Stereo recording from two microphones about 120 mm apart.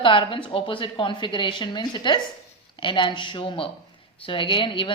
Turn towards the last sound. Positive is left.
turn(degrees=45)  # may be behind; listen again after turning